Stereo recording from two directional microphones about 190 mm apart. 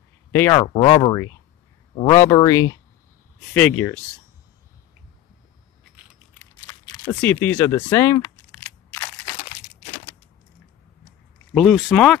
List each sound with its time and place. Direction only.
0.3 s speech: 15° left (ahead or behind)
0.7 s speech: 30° left (ahead or behind); by 4.0 s 10° left (ahead or behind)
6.4 s crumpling: 10° left (ahead or behind)
11.5 s speech: centre (ahead or behind)